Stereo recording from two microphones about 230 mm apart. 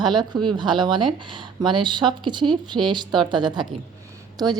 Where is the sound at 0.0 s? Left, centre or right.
Centre.